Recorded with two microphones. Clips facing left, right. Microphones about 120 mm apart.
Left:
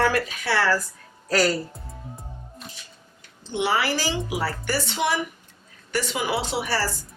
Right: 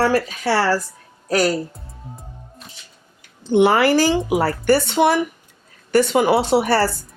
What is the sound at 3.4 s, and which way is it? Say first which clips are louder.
Speech: right 10 dB; 50° right (ahead or behind).